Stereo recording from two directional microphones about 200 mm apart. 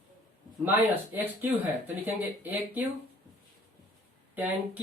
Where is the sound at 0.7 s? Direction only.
10° right (ahead or behind).